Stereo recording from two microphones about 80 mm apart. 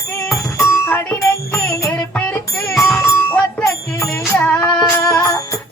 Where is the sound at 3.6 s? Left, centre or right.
Left.